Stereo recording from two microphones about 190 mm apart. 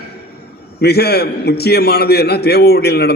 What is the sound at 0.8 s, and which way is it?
A man's voice, 60° left (ahead or behind).